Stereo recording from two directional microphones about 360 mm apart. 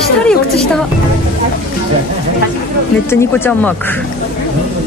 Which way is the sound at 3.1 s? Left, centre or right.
Centre.